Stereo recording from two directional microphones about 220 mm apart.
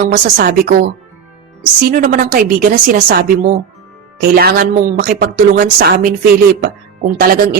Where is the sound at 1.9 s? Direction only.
40° right (ahead or behind).